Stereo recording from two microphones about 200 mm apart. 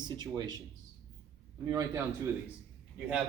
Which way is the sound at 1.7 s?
15° right (ahead or behind).